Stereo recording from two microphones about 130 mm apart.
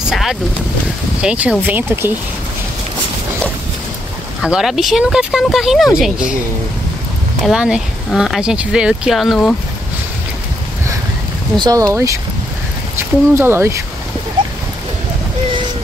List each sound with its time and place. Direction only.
0.1 s vehicle: centre (ahead or behind)
1.2 s speech: 10° right (ahead or behind)
4.4 s speech: 5° right (ahead or behind)
7.4 s speech: 5° right (ahead or behind)
11.5 s speech: 35° right (ahead or behind)
11.8 s speech: 25° right (ahead or behind)
13.3 s speech: 20° right (ahead or behind)